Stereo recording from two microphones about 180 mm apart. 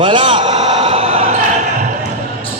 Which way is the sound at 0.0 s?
30° right (ahead or behind).